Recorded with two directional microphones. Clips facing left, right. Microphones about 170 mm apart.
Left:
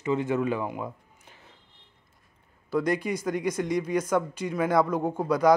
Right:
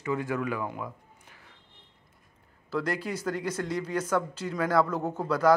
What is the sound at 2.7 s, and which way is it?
Speech, 15° left (ahead or behind).